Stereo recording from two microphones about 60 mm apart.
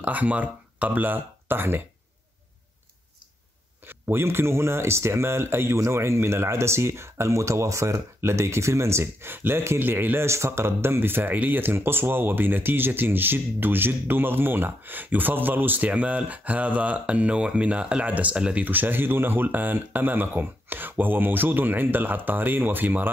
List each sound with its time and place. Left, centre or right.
0.0 s speech: right
3.8 s speech: right
10.2 s speech: right